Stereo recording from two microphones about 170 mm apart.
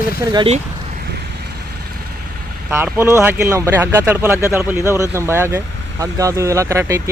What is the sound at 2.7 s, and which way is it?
Speech, 10° right (ahead or behind).